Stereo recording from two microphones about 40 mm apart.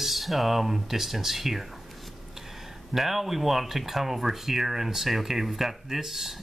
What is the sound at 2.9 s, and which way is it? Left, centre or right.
Speech, centre.